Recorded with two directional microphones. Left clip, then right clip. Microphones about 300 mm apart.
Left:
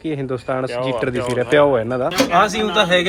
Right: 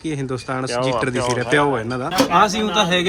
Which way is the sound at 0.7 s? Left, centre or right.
Right.